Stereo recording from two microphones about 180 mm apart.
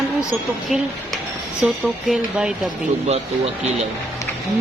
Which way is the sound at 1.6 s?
5° right (ahead or behind).